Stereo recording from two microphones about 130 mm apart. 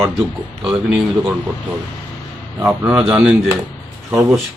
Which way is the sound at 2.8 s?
5° right (ahead or behind).